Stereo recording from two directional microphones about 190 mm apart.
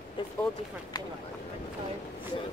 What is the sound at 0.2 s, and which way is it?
Speech, 25° left (ahead or behind).